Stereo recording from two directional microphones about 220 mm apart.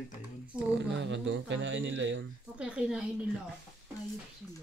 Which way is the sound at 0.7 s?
55° right (ahead or behind).